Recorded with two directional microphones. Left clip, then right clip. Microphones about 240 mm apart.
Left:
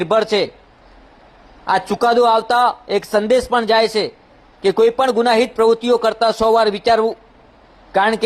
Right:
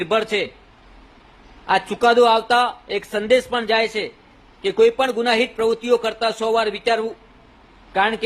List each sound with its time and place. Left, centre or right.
0.0 s a man's voice: centre
1.6 s a man's voice: centre